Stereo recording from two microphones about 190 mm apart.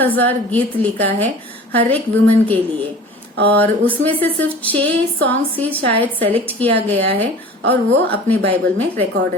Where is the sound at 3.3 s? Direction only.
60° right (ahead or behind).